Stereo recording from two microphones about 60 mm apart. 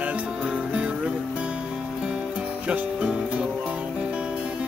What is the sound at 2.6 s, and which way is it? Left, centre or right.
Speech, right.